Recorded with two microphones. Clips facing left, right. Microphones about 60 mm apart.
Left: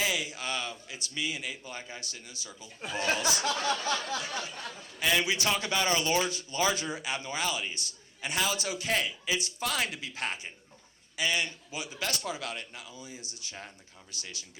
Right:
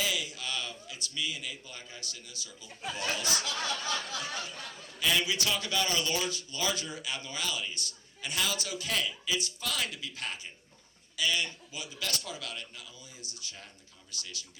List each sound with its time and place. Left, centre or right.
0.0 s a man's voice: left
3.7 s a sound: left
4.9 s a man's voice: left